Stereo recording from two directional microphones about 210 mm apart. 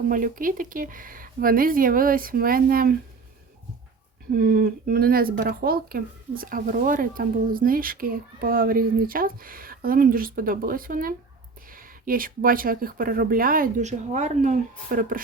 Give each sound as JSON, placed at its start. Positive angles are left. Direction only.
{"t": 0.1, "sound": "speech", "side_deg": -40}
{"t": 4.3, "sound": "speech", "side_deg": -45}